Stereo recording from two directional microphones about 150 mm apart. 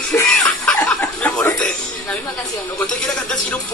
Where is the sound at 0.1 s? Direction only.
20° left (ahead or behind).